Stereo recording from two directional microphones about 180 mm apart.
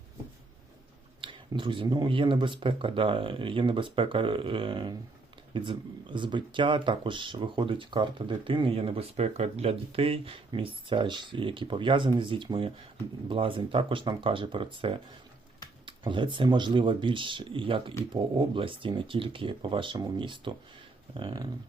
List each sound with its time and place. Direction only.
1.2 s speech: 25° right (ahead or behind)